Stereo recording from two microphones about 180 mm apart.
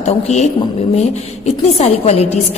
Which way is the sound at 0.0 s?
40° left (ahead or behind).